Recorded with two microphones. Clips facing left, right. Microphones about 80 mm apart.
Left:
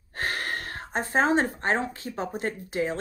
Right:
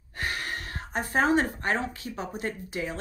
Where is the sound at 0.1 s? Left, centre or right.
Left.